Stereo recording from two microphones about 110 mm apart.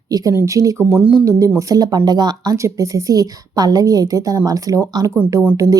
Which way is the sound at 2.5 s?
30° right (ahead or behind).